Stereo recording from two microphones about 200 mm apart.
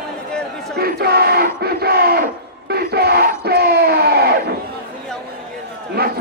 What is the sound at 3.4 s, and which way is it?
Crowd, 50° right (ahead or behind).